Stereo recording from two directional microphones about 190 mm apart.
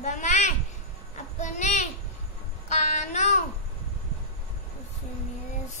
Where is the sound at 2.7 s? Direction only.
40° left (ahead or behind).